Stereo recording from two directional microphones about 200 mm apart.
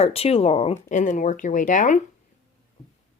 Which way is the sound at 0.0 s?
30° left (ahead or behind).